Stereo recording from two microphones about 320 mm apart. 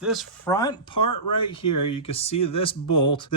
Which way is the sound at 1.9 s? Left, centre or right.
Centre.